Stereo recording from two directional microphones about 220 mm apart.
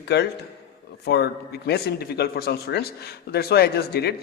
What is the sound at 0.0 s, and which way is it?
A man's voice, 50° left (ahead or behind).